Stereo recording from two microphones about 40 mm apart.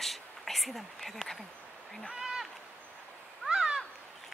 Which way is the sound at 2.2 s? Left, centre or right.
Centre.